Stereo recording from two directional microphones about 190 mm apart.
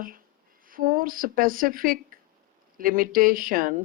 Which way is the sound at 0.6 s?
45° right (ahead or behind).